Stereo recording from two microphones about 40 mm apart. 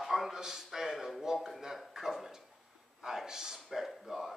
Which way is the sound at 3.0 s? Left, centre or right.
Centre.